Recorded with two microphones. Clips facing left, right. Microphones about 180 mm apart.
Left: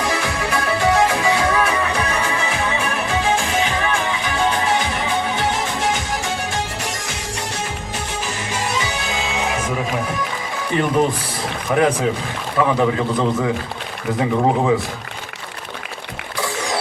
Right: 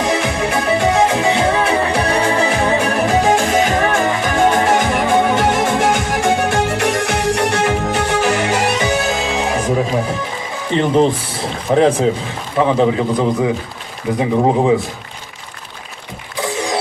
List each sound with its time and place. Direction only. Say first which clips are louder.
0.0 s music: right 5 dB; 20° right (ahead or behind); by 8.9 s 70° right (ahead or behind)
8.9 s music: right 7 dB; 45° right (ahead or behind)
10.7 s a man's voice: right 4 dB; 25° right (ahead or behind)
16.4 s mechanisms: right 4 dB; 20° right (ahead or behind)